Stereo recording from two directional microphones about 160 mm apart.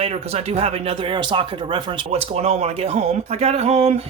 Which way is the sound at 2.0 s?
40° right (ahead or behind).